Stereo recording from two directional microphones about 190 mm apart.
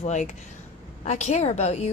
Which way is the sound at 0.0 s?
40° left (ahead or behind).